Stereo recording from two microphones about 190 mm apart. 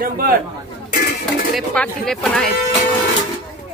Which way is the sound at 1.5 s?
5° left (ahead or behind).